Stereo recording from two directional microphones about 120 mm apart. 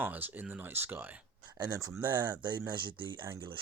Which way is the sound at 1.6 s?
35° right (ahead or behind).